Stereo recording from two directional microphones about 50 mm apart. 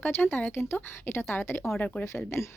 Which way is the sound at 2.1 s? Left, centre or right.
Left.